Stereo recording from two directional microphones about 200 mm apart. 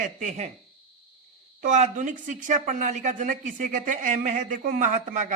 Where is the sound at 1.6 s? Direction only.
35° right (ahead or behind).